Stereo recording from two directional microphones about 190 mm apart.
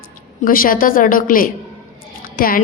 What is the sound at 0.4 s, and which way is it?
A woman's voice, 50° left (ahead or behind).